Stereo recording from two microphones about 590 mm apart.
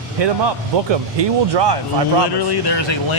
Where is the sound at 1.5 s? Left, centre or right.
Right.